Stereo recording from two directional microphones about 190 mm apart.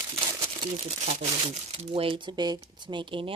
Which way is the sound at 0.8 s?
35° right (ahead or behind).